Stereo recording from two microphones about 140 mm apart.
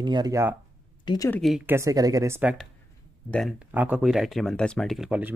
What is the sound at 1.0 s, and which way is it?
Speech, 30° left (ahead or behind).